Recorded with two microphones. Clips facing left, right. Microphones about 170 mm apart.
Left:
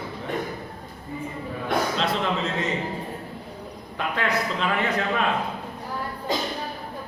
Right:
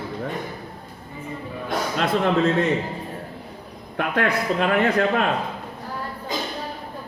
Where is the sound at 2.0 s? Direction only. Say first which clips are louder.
Right 5 dB; 50° right (ahead or behind).